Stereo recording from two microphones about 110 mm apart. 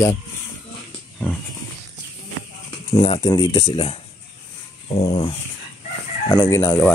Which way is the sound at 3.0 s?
55° left (ahead or behind).